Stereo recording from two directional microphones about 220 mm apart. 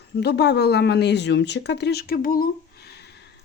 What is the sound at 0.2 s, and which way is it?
Speech, 50° left (ahead or behind).